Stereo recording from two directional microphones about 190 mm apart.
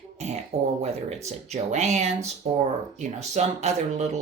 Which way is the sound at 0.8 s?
35° right (ahead or behind).